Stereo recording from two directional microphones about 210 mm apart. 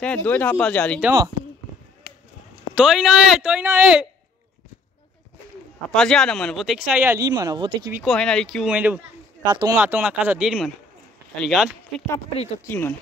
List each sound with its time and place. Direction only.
0.0 s speech: 5° left (ahead or behind)
2.7 s speech: centre (ahead or behind)
5.9 s speech: 5° left (ahead or behind); by 7.9 s 20° right (ahead or behind)
7.9 s speech: centre (ahead or behind)
9.4 s speech: 20° right (ahead or behind)
9.8 s speech: 10° right (ahead or behind)
12.6 s speech: 10° left (ahead or behind)